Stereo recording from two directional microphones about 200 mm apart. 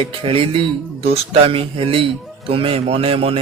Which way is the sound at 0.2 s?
30° right (ahead or behind).